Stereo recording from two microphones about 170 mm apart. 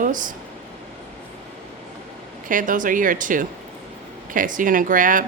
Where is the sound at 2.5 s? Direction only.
50° right (ahead or behind).